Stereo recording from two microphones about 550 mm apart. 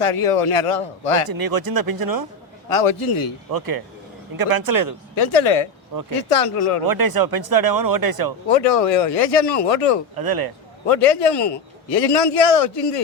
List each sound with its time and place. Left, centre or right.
0.0 s a man's voice: left
1.3 s speech: right
2.6 s a man's voice: left
3.5 s speech: right
5.1 s a man's voice: left
6.8 s speech: right
8.4 s a man's voice: left
10.2 s speech: right
10.8 s a man's voice: left